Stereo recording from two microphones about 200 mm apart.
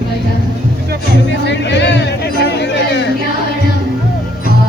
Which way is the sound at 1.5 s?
60° left (ahead or behind).